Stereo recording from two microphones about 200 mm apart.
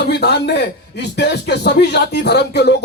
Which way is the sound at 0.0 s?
55° left (ahead or behind).